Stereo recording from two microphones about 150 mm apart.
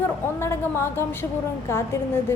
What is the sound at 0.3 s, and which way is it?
Speech, 15° left (ahead or behind).